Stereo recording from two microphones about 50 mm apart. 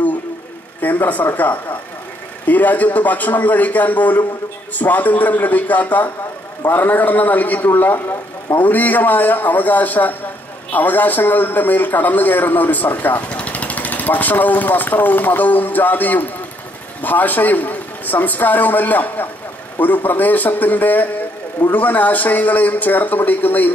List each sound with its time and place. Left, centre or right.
0.8 s a man's voice: left